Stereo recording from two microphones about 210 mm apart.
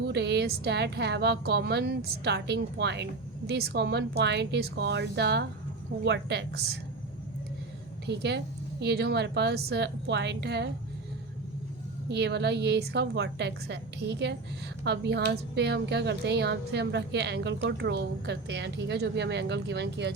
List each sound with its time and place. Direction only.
0.1 s a woman's voice: 55° right (ahead or behind)
8.0 s a woman's voice: 55° right (ahead or behind)
12.0 s speech: 55° right (ahead or behind)